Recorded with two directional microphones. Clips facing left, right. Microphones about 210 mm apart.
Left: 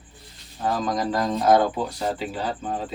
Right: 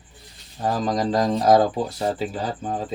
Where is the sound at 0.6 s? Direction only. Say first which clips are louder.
Right 2 dB; 35° right (ahead or behind).